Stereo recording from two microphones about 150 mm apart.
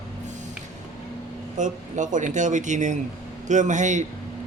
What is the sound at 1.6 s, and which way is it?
Speech, 55° right (ahead or behind).